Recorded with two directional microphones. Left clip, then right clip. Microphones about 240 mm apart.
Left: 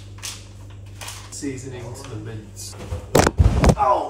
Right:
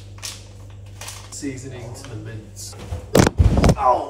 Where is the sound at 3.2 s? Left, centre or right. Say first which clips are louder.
Right 1 dB; centre.